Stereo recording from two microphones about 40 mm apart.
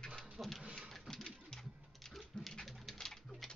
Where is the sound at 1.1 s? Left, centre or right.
Centre.